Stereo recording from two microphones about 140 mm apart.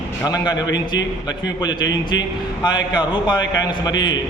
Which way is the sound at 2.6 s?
30° left (ahead or behind).